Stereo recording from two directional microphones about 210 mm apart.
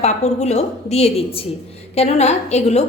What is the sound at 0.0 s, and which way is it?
A woman's voice, 30° left (ahead or behind).